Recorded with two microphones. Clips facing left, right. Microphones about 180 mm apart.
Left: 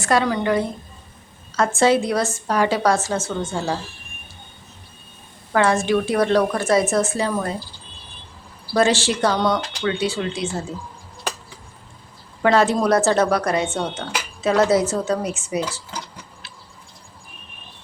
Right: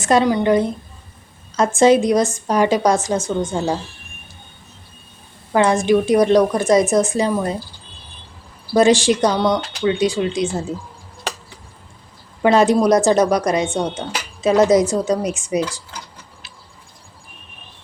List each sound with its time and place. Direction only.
0.0 s a woman's voice: 20° right (ahead or behind)
5.5 s a woman's voice: 15° right (ahead or behind)
8.7 s a woman's voice: 15° right (ahead or behind)
12.4 s a woman's voice: 15° right (ahead or behind)